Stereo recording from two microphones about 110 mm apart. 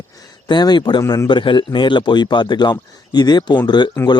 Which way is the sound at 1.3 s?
45° left (ahead or behind).